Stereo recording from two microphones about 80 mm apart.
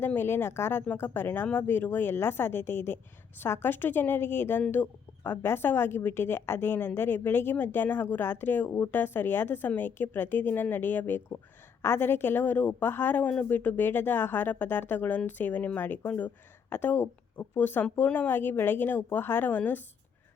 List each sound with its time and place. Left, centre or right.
0.0 s a woman's voice: left